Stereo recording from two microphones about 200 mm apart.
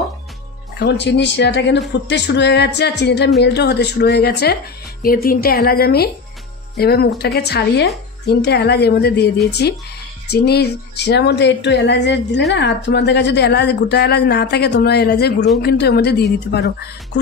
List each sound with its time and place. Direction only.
0.7 s a woman's voice: 60° left (ahead or behind)